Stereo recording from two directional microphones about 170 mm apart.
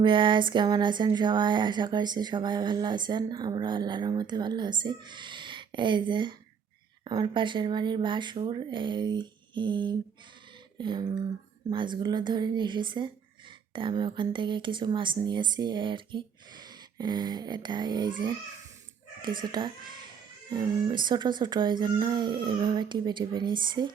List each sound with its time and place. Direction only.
0.0 s speech: 30° right (ahead or behind)
19.4 s speech: 25° right (ahead or behind)